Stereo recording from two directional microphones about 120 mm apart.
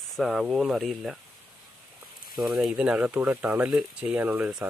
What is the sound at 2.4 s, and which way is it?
Speech, 5° right (ahead or behind).